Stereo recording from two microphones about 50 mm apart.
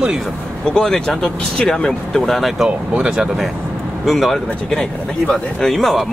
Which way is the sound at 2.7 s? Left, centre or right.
Right.